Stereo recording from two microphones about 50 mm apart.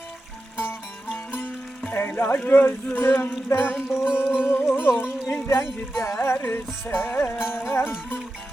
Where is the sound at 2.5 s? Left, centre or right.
Left.